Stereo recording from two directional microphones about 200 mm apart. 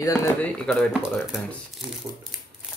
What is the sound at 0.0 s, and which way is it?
Speech, 15° left (ahead or behind).